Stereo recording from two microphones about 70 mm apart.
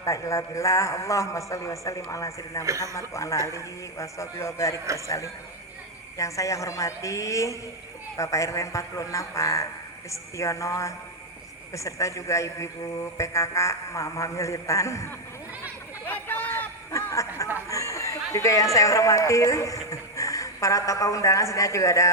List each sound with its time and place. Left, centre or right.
0.0 s a man's voice: left
2.6 s a man's voice: right
3.1 s a man's voice: left
16.2 s a sound: left
16.9 s a sound: left
17.7 s speech: left